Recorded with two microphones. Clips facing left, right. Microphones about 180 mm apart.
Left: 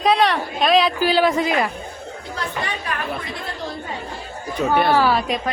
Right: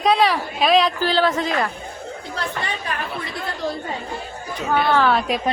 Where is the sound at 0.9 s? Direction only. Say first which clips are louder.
Left 2 dB; 10° left (ahead or behind).